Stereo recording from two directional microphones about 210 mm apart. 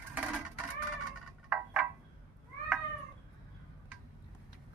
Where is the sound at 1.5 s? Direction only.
5° right (ahead or behind).